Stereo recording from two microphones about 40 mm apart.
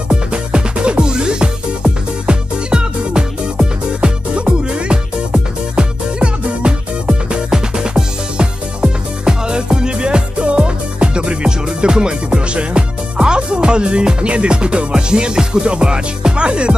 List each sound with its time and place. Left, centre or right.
0.1 s music: right